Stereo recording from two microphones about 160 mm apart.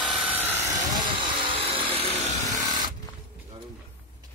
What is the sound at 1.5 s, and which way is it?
Chainsaw, 35° right (ahead or behind).